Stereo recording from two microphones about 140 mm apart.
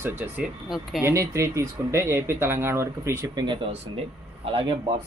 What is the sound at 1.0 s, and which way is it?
Speech, 20° right (ahead or behind).